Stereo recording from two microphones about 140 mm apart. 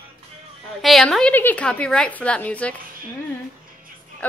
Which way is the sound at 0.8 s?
Centre (ahead or behind).